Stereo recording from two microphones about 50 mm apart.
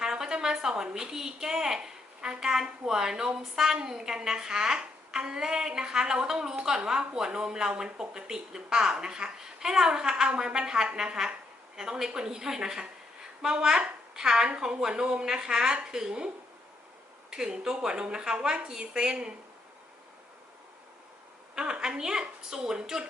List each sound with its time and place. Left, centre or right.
0.0 s a woman's voice: centre
17.3 s a woman's voice: centre
21.5 s a woman's voice: centre